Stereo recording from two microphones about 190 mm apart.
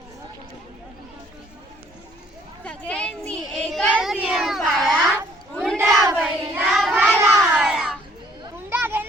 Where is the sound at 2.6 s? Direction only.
5° left (ahead or behind).